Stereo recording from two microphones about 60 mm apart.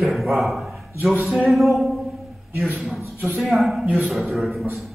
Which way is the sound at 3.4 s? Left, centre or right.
Centre.